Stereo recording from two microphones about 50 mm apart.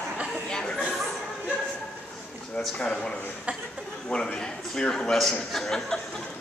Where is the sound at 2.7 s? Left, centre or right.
Left.